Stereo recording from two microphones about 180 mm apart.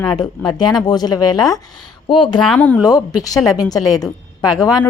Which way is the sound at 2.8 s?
20° left (ahead or behind).